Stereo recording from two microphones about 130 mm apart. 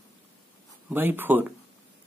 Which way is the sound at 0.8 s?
15° right (ahead or behind).